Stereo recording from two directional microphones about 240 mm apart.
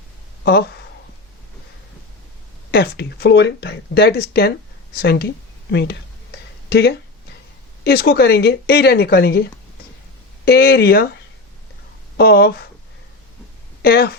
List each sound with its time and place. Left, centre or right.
0.4 s speech: left
2.7 s speech: left
12.1 s speech: left
13.8 s speech: left